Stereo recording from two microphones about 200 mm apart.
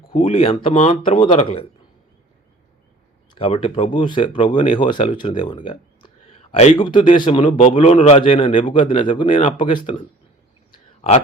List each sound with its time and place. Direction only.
0.1 s speech: 30° left (ahead or behind)
3.3 s speech: 30° left (ahead or behind)